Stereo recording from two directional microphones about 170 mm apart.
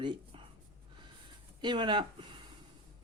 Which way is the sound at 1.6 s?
25° right (ahead or behind).